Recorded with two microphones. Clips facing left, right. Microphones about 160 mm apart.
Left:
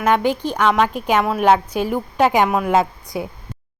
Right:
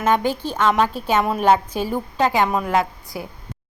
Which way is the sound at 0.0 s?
10° left (ahead or behind).